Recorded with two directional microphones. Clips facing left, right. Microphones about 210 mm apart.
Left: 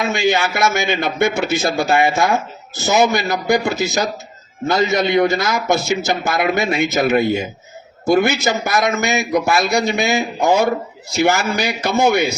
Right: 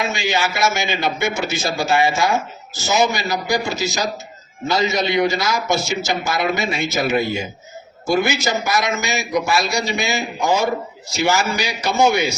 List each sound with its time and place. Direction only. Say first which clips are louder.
0.0 s a man's voice: left 4 dB; 55° left (ahead or behind)